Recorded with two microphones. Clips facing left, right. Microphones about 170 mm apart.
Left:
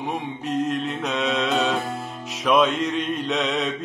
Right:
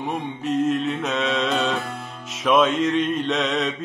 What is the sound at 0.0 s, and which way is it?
Mantra, centre (ahead or behind).